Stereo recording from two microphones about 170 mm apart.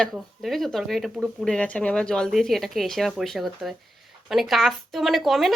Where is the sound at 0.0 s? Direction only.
Centre (ahead or behind).